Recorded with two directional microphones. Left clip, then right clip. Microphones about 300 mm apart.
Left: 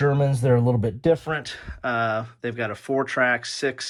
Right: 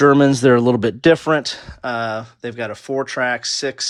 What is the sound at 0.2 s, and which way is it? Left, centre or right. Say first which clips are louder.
Speech: right 9 dB; right.